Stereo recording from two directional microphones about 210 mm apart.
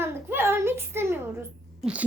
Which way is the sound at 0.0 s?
10° right (ahead or behind).